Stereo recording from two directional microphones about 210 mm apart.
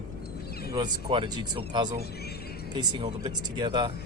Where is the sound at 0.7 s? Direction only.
20° right (ahead or behind).